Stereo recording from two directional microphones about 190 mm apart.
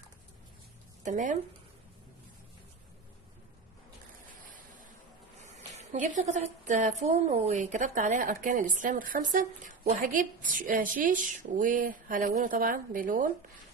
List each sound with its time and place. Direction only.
1.0 s speech: 40° right (ahead or behind)
5.4 s speech: 35° right (ahead or behind)